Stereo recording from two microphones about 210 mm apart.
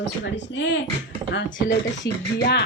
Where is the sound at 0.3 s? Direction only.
60° left (ahead or behind).